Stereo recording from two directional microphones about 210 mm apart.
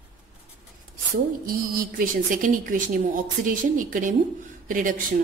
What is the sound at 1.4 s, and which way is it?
A woman's voice, 45° right (ahead or behind).